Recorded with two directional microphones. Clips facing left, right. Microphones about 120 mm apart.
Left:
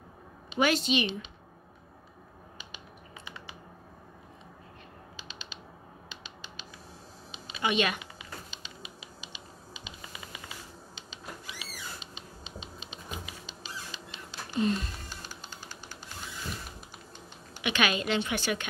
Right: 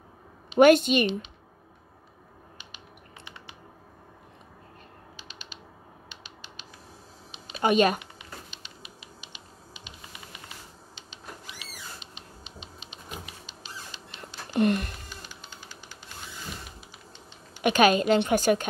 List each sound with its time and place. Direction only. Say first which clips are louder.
0.6 s a woman's voice: right 9 dB; 55° right (ahead or behind)
7.6 s a woman's voice: right 7 dB; 40° right (ahead or behind)
14.5 s speech: right 5 dB; 65° right (ahead or behind)
15.2 s music: left 1 dB; 40° left (ahead or behind)
17.6 s a woman's voice: right 9 dB; 45° right (ahead or behind)